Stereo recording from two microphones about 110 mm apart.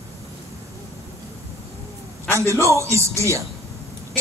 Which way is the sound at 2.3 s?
25° right (ahead or behind).